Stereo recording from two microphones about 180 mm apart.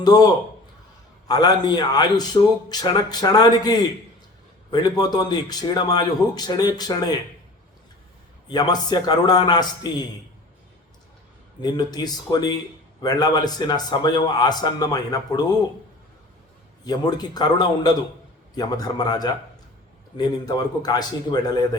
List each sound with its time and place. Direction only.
0.0 s a man's voice: 20° left (ahead or behind)
1.3 s a man's voice: 20° left (ahead or behind)
8.4 s a man's voice: 20° left (ahead or behind)
11.6 s a man's voice: 20° left (ahead or behind)
16.8 s a man's voice: 25° left (ahead or behind)